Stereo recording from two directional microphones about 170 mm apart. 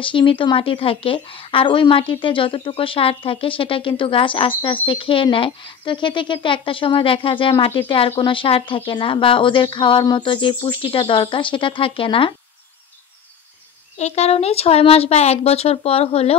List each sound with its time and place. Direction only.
0.0 s speech: 30° left (ahead or behind)
13.9 s speech: 40° left (ahead or behind)